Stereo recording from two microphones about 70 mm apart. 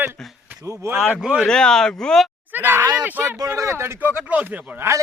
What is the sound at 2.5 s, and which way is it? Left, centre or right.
Speech, right.